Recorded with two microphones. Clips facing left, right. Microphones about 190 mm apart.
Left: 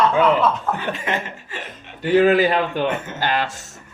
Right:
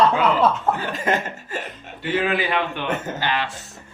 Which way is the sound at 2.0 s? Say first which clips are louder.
Left 8 dB; 40° left (ahead or behind).